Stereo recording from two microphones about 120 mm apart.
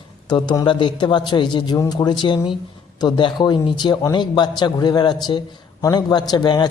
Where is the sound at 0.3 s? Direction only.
35° left (ahead or behind).